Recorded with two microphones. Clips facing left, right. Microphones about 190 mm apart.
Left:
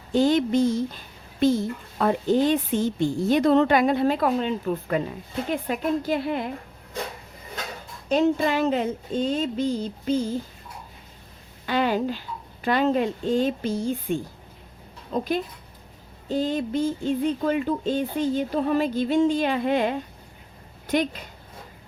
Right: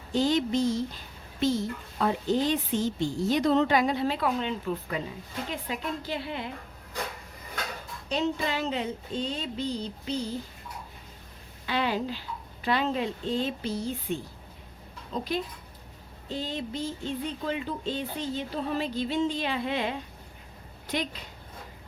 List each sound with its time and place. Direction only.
0.1 s a woman's voice: 55° left (ahead or behind)
8.1 s a woman's voice: 50° left (ahead or behind)
11.6 s a woman's voice: 45° left (ahead or behind)